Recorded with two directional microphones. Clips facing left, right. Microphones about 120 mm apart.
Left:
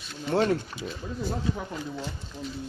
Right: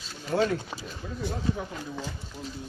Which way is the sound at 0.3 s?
35° left (ahead or behind).